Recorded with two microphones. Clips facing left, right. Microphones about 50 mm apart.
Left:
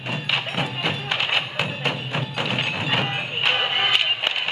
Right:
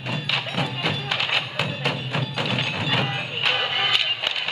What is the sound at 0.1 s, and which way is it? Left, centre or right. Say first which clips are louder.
Music: left 1 dB; centre.